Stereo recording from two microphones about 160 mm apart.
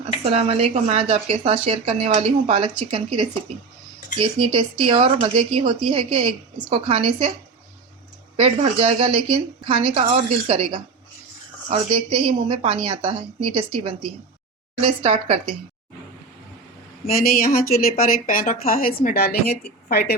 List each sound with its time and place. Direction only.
0.0 s speech: 40° right (ahead or behind)
8.4 s speech: 40° right (ahead or behind)
17.2 s a woman's voice: 65° left (ahead or behind)